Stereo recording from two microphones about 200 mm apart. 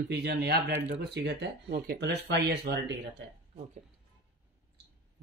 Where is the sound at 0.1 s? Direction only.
55° right (ahead or behind).